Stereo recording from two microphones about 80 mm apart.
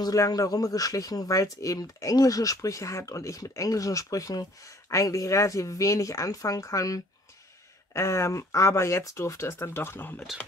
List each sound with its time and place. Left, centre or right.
0.0 s speech: left